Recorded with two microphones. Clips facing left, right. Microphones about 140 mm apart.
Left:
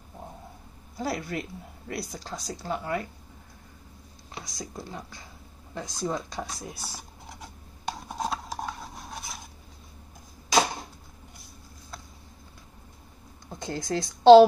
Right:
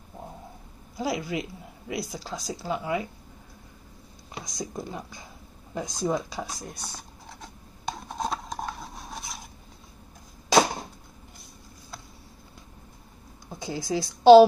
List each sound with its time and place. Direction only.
0.9 s a woman's voice: 5° right (ahead or behind)
4.3 s a woman's voice: 15° right (ahead or behind); by 7.5 s 10° left (ahead or behind)
8.1 s rub: 5° left (ahead or behind)
13.5 s a woman's voice: 5° right (ahead or behind)